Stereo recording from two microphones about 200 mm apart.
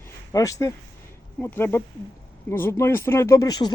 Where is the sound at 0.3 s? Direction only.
15° left (ahead or behind).